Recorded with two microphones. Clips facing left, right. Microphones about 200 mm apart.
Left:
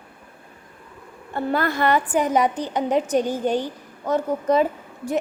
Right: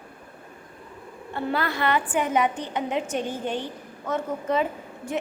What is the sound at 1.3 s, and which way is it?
A woman's voice, 45° left (ahead or behind).